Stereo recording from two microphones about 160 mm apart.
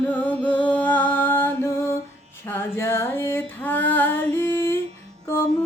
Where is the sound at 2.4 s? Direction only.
15° left (ahead or behind).